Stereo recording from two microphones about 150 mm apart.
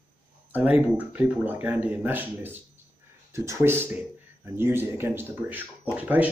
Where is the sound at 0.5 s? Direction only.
10° right (ahead or behind).